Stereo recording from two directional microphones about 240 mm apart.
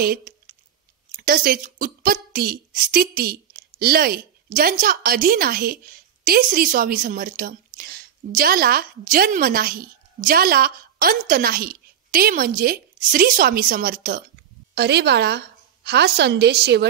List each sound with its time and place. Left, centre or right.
0.0 s a woman's voice: right